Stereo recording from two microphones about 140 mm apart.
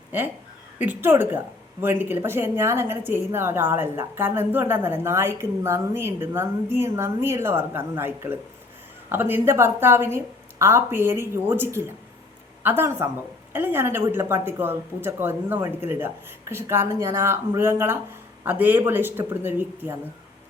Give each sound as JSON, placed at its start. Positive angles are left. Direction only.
{"t": 0.8, "sound": "a woman's voice", "side_deg": -15}